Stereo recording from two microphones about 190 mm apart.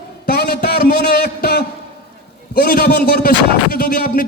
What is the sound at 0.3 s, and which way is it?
A man's voice, 60° left (ahead or behind).